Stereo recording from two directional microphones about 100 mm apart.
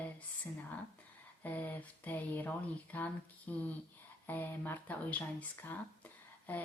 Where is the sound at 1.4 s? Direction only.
15° left (ahead or behind).